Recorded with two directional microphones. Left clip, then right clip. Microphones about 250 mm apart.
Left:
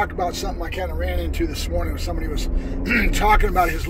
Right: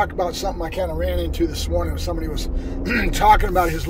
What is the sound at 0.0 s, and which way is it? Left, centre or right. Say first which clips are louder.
Speech: right 2 dB; centre.